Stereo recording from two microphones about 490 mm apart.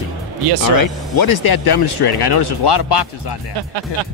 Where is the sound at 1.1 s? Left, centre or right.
Left.